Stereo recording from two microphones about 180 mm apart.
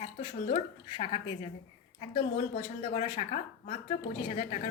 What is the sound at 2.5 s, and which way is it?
Speech, 45° left (ahead or behind).